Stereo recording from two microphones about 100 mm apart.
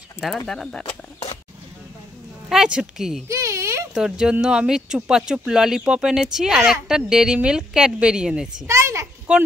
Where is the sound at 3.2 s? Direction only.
30° right (ahead or behind).